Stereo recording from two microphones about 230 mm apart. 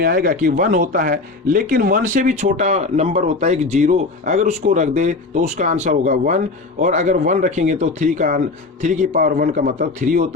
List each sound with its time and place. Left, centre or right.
0.0 s speech: right